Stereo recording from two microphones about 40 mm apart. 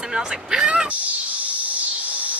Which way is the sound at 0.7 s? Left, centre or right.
Right.